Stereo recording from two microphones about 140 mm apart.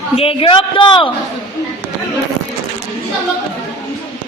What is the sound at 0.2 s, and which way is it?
Speech, 40° left (ahead or behind).